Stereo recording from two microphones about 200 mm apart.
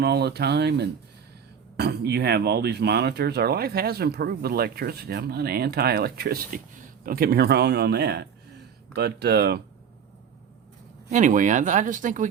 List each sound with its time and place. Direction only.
0.0 s speech: 55° right (ahead or behind)
11.1 s speech: 40° right (ahead or behind)